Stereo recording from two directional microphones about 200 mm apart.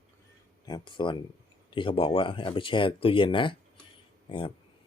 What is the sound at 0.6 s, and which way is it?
Speech, 20° left (ahead or behind).